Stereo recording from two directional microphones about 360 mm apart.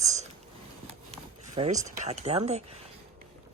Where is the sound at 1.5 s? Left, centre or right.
Centre.